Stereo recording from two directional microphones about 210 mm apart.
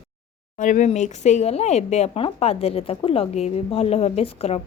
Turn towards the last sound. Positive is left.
turn(degrees=30)  # may be behind; listen again after turning